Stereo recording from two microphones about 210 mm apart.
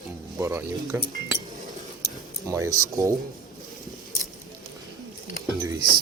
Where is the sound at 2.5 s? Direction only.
15° right (ahead or behind).